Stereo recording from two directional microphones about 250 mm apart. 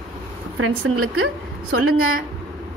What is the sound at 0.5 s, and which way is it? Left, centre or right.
Speech, right.